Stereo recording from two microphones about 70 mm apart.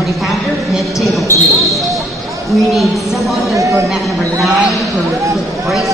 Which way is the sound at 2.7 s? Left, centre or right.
Centre.